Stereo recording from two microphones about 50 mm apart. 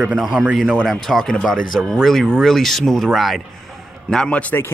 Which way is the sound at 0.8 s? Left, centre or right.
Centre.